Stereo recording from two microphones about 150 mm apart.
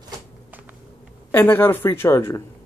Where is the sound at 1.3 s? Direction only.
15° left (ahead or behind).